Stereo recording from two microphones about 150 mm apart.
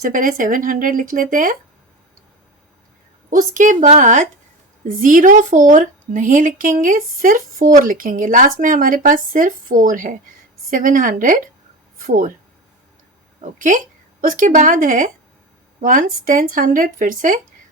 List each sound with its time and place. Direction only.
0.0 s speech: 65° right (ahead or behind)
3.2 s speech: 60° right (ahead or behind)
13.4 s a woman's voice: 60° right (ahead or behind)